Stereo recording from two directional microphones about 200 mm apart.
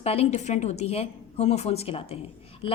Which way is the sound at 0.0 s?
30° left (ahead or behind).